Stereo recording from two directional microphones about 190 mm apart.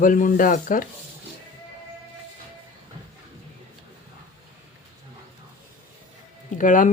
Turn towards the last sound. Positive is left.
turn(degrees=40)  # may be behind; listen again after turning